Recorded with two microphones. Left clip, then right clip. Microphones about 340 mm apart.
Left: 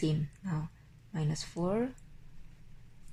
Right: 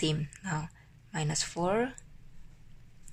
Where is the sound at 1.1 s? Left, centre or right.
Right.